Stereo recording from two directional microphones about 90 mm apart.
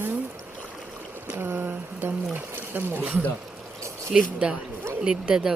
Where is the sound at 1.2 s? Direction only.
20° right (ahead or behind).